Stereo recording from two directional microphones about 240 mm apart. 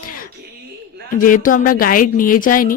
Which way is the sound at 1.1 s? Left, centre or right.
Left.